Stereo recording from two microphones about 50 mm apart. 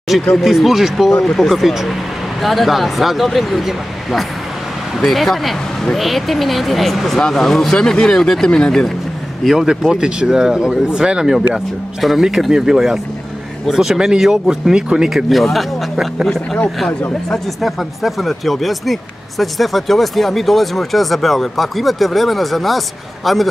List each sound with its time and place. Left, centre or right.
0.3 s speech: centre
9.4 s speech: centre
9.7 s speech: centre
15.2 s speech: centre
17.6 s speech: centre